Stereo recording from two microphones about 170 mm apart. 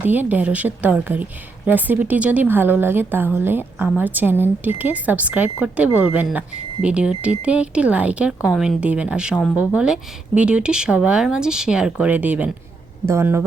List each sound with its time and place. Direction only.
0.0 s a woman's voice: 10° right (ahead or behind)
9.3 s speech: 10° left (ahead or behind)
9.6 s a woman's voice: 5° right (ahead or behind)